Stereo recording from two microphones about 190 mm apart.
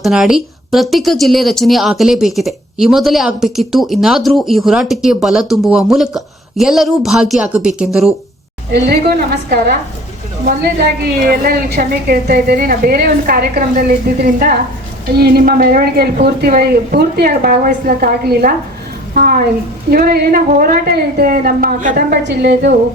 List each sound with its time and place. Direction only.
0.0 s a woman's voice: centre (ahead or behind)
8.7 s a woman's voice: 60° right (ahead or behind)
11.2 s a woman's voice: 50° right (ahead or behind)
22.3 s a woman's voice: 60° right (ahead or behind)